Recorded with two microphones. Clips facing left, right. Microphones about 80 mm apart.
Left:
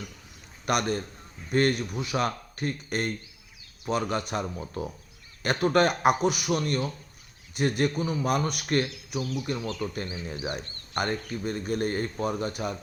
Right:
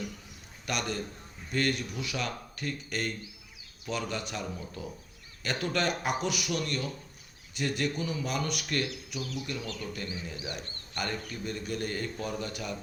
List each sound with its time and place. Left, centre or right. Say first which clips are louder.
0.6 s a man's voice: left 7 dB; left
6.6 s a man's voice: left 5 dB; left
10.4 s a man's voice: left 6 dB; left